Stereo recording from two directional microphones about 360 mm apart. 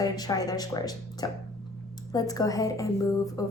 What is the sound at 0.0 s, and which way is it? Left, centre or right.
A woman's voice, centre.